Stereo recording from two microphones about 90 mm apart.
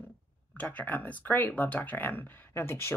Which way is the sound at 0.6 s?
15° left (ahead or behind).